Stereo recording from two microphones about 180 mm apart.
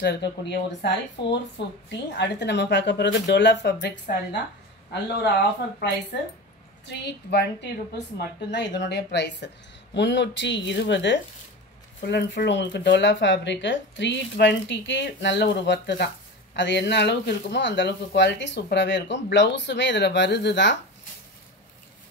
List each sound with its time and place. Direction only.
0.0 s speech: 65° left (ahead or behind)
6.9 s speech: 70° left (ahead or behind)